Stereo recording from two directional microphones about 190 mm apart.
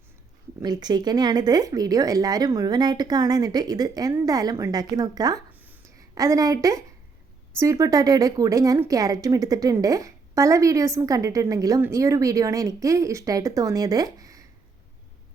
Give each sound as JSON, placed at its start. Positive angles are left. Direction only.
{"t": 0.6, "sound": "speech", "side_deg": -20}
{"t": 5.5, "sound": "a sound", "side_deg": -10}
{"t": 7.6, "sound": "speech", "side_deg": -15}